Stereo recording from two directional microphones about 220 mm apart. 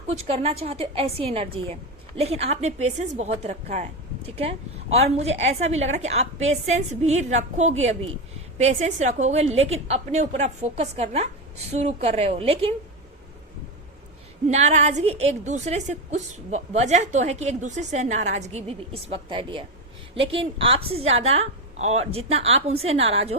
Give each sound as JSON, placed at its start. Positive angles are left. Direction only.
{"t": 0.1, "sound": "a woman's voice", "side_deg": -30}
{"t": 4.9, "sound": "a woman's voice", "side_deg": -30}
{"t": 14.5, "sound": "a woman's voice", "side_deg": -30}